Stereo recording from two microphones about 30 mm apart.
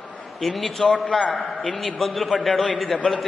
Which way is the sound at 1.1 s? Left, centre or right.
Centre.